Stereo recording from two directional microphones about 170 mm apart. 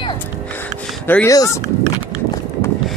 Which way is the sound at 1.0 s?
15° left (ahead or behind).